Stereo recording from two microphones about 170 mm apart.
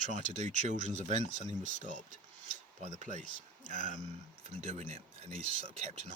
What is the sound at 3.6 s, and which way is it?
Speech, 50° left (ahead or behind).